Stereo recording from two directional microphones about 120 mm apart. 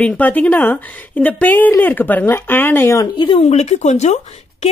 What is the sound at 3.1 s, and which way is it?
Speech, 45° left (ahead or behind).